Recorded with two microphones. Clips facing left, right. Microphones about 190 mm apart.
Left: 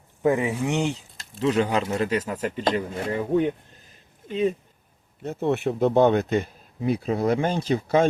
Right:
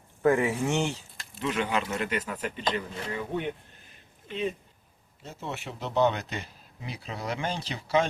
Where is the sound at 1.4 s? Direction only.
35° left (ahead or behind).